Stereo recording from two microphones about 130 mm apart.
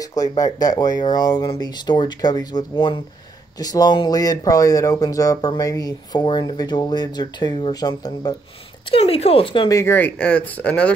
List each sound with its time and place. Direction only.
0.0 s speech: 30° left (ahead or behind)
3.5 s speech: 30° left (ahead or behind)
8.8 s speech: 45° left (ahead or behind)
9.7 s speech: 20° left (ahead or behind)